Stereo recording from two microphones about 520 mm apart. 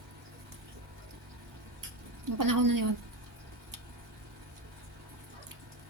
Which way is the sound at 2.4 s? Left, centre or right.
Right.